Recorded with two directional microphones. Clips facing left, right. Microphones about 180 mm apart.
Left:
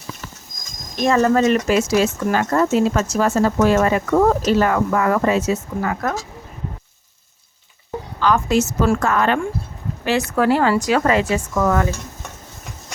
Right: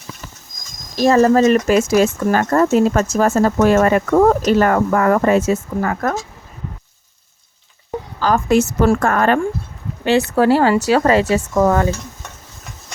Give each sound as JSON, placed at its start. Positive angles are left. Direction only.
{"t": 0.9, "sound": "speech", "side_deg": -35}
{"t": 7.9, "sound": "speech", "side_deg": -40}
{"t": 10.0, "sound": "speech", "side_deg": -30}